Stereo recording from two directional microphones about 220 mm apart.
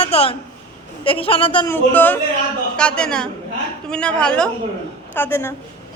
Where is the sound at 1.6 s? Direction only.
10° left (ahead or behind).